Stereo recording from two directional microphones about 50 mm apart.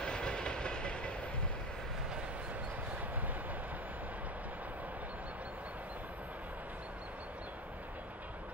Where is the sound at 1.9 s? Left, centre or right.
Centre.